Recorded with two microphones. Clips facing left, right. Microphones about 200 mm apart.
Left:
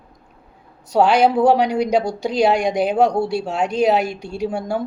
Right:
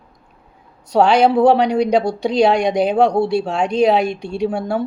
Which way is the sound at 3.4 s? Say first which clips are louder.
Right 2 dB; 5° left (ahead or behind).